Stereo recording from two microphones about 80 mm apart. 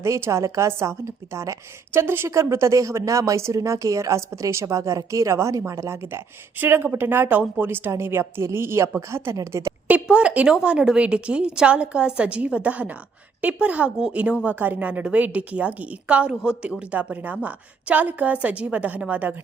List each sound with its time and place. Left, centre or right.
0.0 s a woman's voice: right
9.8 s a woman's voice: centre